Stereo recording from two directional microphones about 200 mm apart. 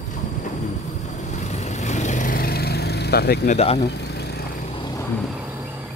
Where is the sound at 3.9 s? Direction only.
55° left (ahead or behind).